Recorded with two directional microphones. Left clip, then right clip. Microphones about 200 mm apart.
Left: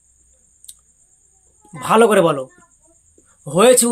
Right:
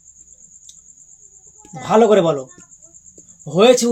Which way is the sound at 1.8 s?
25° left (ahead or behind).